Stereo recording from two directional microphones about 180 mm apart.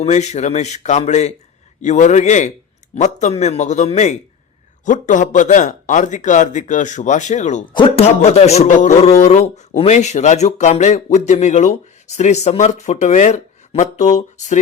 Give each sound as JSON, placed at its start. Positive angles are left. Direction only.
{"t": 0.0, "sound": "a man's voice", "side_deg": 40}
{"t": 7.7, "sound": "a man's voice", "side_deg": 30}